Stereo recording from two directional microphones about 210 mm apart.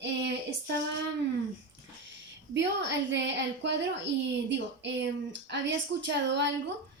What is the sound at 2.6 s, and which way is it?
A woman's voice, 55° right (ahead or behind).